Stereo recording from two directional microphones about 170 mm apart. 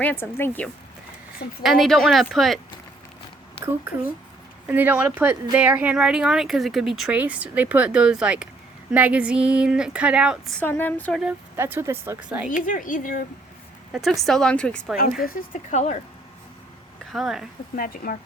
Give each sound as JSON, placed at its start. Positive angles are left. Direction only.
{"t": 0.0, "sound": "speech", "side_deg": 10}
{"t": 1.6, "sound": "speech", "side_deg": 0}
{"t": 4.7, "sound": "speech", "side_deg": -10}
{"t": 10.6, "sound": "speech", "side_deg": 10}
{"t": 11.2, "sound": "speech", "side_deg": -10}
{"t": 12.5, "sound": "speech", "side_deg": 50}
{"t": 13.9, "sound": "speech", "side_deg": 0}
{"t": 15.2, "sound": "speech", "side_deg": 60}
{"t": 17.1, "sound": "speech", "side_deg": 0}
{"t": 17.7, "sound": "speech", "side_deg": 55}